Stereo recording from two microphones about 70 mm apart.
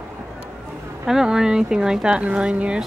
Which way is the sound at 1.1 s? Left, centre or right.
Centre.